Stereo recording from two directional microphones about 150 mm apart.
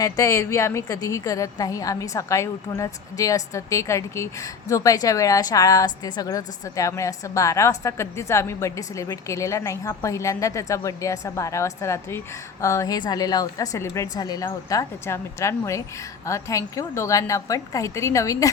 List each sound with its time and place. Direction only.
0.0 s a woman's voice: 20° left (ahead or behind)